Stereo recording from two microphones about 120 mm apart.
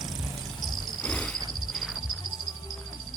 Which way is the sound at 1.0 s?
10° left (ahead or behind).